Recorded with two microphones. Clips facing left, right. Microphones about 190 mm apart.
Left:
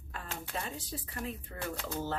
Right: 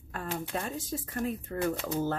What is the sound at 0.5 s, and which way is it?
Speech, 50° right (ahead or behind).